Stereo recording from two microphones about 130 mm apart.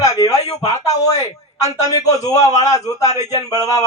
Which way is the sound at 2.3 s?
60° left (ahead or behind).